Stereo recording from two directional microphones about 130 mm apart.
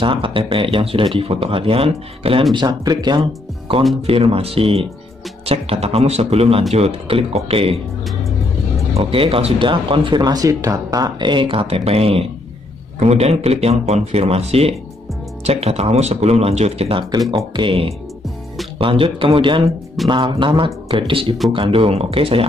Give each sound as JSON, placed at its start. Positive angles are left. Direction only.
{"t": 0.0, "sound": "speech", "side_deg": -40}
{"t": 2.5, "sound": "speech", "side_deg": -35}
{"t": 4.0, "sound": "speech", "side_deg": -50}
{"t": 8.9, "sound": "speech", "side_deg": -45}
{"t": 17.3, "sound": "speech", "side_deg": -40}